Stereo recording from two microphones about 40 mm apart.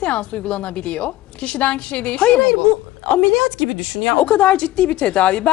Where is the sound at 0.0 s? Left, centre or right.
Left.